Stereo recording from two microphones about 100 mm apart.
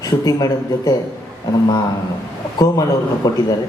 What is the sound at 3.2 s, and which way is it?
Speech, 40° left (ahead or behind).